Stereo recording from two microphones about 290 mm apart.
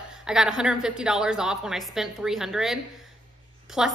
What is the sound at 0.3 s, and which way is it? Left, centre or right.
A woman's voice, centre.